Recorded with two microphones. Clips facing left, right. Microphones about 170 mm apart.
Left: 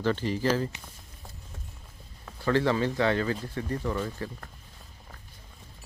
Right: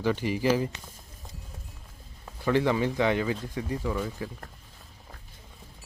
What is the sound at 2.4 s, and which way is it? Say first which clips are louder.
Speech: even; 15° right (ahead or behind).